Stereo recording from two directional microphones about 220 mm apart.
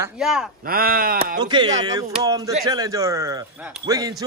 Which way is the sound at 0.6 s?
40° right (ahead or behind).